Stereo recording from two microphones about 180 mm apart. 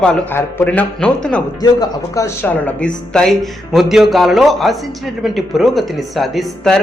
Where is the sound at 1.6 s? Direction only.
20° left (ahead or behind).